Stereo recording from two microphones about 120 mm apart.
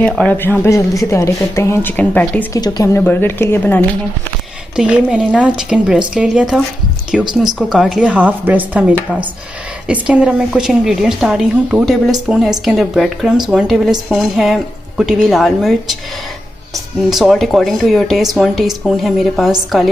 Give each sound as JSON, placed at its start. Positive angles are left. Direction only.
{"t": 0.2, "sound": "speech", "side_deg": 15}
{"t": 2.5, "sound": "speech", "side_deg": 25}
{"t": 3.0, "sound": "speech", "side_deg": 15}
{"t": 4.7, "sound": "a woman's voice", "side_deg": -10}
{"t": 8.1, "sound": "a woman's voice", "side_deg": -15}
{"t": 17.1, "sound": "a woman's voice", "side_deg": 0}